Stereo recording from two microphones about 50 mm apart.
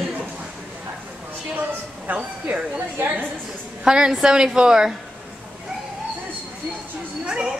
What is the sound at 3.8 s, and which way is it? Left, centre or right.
Speech, centre.